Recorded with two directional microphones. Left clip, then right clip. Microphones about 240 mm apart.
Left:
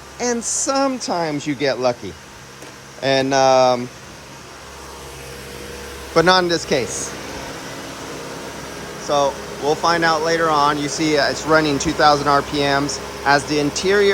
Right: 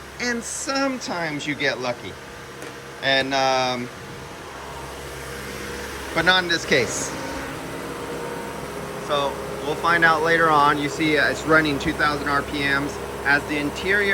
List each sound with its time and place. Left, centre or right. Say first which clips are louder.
0.2 s speech: left 5 dB; centre
3.0 s speech: left 4 dB; left
6.5 s speech: left 1 dB; centre
9.0 s speech: left 6 dB; centre